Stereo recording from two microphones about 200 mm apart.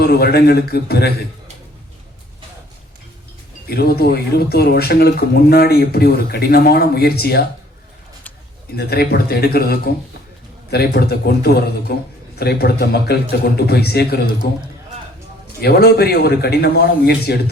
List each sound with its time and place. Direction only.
0.0 s speech: 50° left (ahead or behind)
3.7 s speech: 50° left (ahead or behind)
8.7 s speech: 50° left (ahead or behind)
15.6 s speech: 50° left (ahead or behind)